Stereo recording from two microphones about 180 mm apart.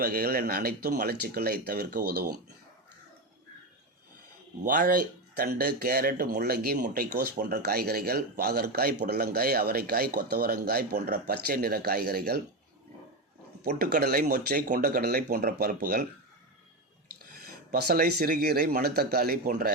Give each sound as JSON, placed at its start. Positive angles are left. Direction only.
{"t": 0.0, "sound": "speech", "side_deg": -55}
{"t": 4.6, "sound": "speech", "side_deg": -50}
{"t": 13.7, "sound": "speech", "side_deg": -55}
{"t": 17.4, "sound": "speech", "side_deg": -60}